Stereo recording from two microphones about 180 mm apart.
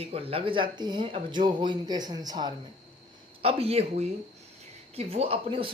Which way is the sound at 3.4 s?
35° right (ahead or behind).